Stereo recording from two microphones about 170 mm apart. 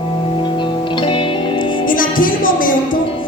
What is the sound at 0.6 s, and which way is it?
Music, 30° left (ahead or behind).